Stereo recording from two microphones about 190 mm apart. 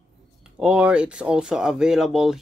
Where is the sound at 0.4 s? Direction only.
5° right (ahead or behind).